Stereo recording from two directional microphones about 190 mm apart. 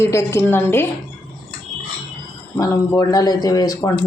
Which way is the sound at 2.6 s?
20° left (ahead or behind).